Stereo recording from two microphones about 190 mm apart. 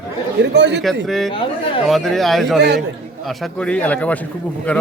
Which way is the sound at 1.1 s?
Centre (ahead or behind).